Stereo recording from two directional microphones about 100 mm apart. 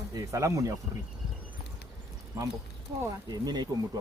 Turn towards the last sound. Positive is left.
turn(degrees=-45)  # may be behind; listen again after turning